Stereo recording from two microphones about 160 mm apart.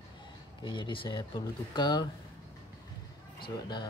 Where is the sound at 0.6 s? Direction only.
30° left (ahead or behind).